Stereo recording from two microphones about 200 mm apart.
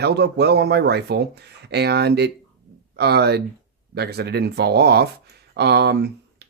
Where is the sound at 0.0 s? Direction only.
55° right (ahead or behind).